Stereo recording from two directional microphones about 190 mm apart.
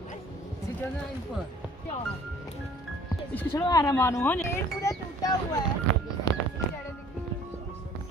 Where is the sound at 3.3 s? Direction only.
15° left (ahead or behind).